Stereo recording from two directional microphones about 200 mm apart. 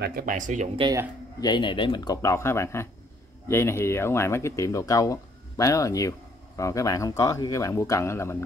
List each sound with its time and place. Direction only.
0.0 s speech: 45° right (ahead or behind)
1.4 s speech: 20° left (ahead or behind)